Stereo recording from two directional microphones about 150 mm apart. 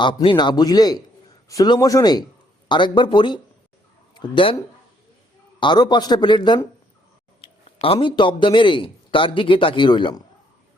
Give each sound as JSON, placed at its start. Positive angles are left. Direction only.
{"t": 0.0, "sound": "a man's voice", "side_deg": 35}
{"t": 5.5, "sound": "a man's voice", "side_deg": 30}